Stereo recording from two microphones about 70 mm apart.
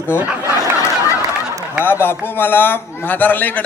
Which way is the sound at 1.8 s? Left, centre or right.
Left.